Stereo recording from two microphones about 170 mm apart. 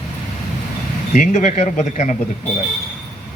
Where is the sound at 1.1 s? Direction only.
45° left (ahead or behind).